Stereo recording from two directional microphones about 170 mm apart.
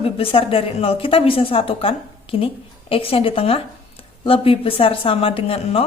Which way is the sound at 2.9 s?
35° left (ahead or behind).